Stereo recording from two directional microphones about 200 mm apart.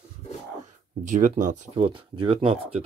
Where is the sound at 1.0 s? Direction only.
40° right (ahead or behind).